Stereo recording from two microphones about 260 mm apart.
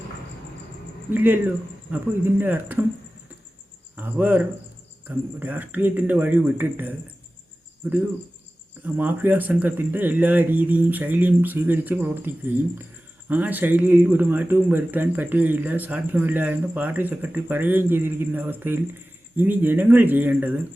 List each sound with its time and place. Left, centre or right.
1.1 s speech: centre
3.9 s speech: centre
8.8 s speech: centre